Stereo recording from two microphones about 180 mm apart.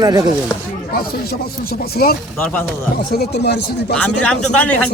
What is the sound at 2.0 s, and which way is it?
Speech, 60° left (ahead or behind).